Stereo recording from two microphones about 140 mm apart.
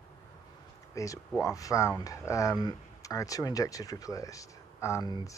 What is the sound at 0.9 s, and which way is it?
Speech, 25° left (ahead or behind).